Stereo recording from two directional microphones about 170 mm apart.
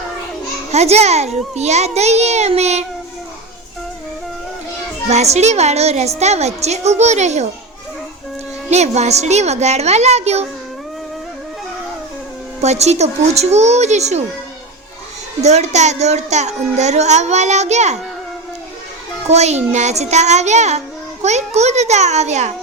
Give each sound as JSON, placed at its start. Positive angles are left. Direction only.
{"t": 0.7, "sound": "child singing", "side_deg": -40}
{"t": 5.0, "sound": "child singing", "side_deg": -40}
{"t": 8.7, "sound": "child singing", "side_deg": -40}
{"t": 12.6, "sound": "child singing", "side_deg": -40}
{"t": 15.4, "sound": "child singing", "side_deg": -40}
{"t": 19.3, "sound": "child singing", "side_deg": -40}